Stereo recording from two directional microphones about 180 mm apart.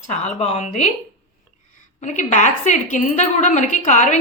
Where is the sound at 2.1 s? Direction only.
40° left (ahead or behind).